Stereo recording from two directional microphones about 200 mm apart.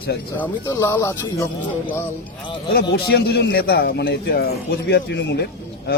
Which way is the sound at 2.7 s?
55° left (ahead or behind).